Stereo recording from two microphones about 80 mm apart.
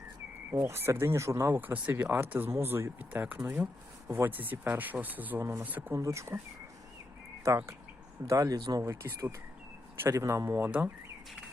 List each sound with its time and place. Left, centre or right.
0.5 s speech: right
5.9 s speech: right
7.4 s speech: right
8.5 s speech: right
8.8 s speech: right